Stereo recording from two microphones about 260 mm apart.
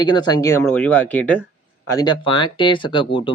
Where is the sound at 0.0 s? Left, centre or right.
Centre.